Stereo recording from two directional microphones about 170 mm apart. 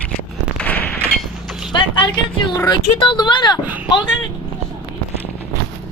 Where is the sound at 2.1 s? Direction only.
20° left (ahead or behind).